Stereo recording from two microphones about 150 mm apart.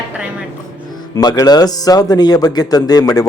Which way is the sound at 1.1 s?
25° left (ahead or behind).